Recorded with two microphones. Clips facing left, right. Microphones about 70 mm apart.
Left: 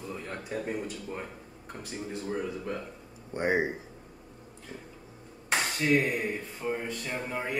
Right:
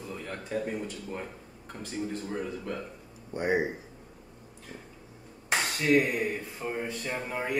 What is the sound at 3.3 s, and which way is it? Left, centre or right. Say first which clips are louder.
Speech: even; left.